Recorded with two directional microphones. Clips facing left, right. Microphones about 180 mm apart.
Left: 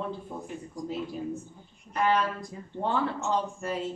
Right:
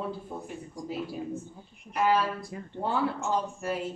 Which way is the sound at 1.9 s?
5° right (ahead or behind).